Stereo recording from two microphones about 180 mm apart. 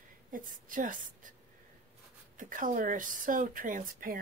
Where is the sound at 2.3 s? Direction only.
45° right (ahead or behind).